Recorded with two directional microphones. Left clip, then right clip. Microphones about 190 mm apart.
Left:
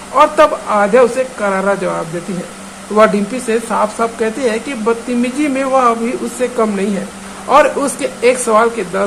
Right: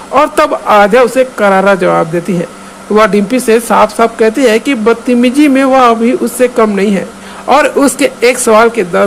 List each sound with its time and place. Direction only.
0.1 s speech: 45° right (ahead or behind)